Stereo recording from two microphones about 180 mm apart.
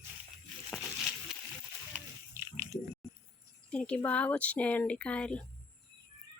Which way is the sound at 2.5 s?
15° right (ahead or behind).